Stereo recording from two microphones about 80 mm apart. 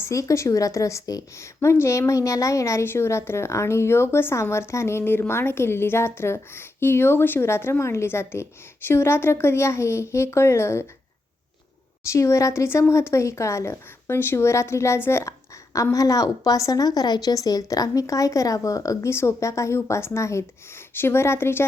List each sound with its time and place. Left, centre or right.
0.0 s a woman's voice: left
2.8 s a woman's voice: left
12.0 s a woman's voice: left
15.3 s a woman's voice: left